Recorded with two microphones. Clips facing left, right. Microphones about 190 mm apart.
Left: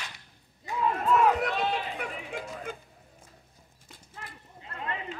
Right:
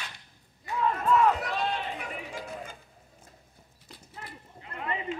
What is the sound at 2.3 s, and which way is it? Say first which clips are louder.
Music: left 2 dB; 60° left (ahead or behind).